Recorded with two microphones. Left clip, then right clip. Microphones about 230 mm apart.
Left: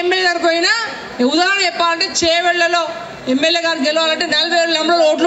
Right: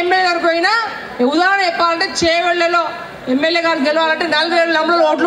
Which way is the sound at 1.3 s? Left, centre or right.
Left.